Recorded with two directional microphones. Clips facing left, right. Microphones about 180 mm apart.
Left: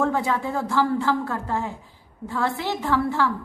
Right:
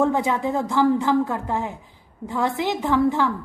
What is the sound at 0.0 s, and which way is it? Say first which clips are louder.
A woman's voice: right 3 dB; 20° right (ahead or behind).